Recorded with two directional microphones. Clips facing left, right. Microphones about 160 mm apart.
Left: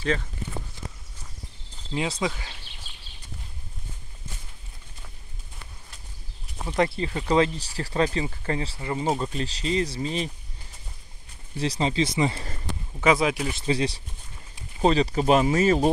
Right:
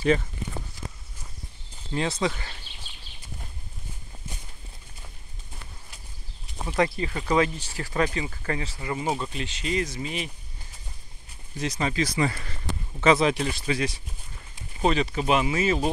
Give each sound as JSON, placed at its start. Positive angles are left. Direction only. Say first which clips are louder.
{"t": 2.0, "sound": "speech", "louder": "right 1 dB", "side_deg": 10}
{"t": 6.8, "sound": "speech", "louder": "left 1 dB", "side_deg": 30}
{"t": 11.5, "sound": "speech", "louder": "left 2 dB", "side_deg": 30}
{"t": 13.0, "sound": "speech", "louder": "right 1 dB", "side_deg": 10}
{"t": 13.5, "sound": "speech", "louder": "left 2 dB", "side_deg": 25}